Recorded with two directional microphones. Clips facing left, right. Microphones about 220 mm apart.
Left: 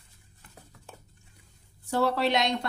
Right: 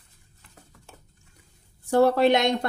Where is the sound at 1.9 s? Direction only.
50° right (ahead or behind).